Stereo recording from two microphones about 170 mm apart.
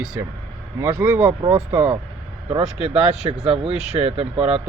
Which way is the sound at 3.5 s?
35° right (ahead or behind).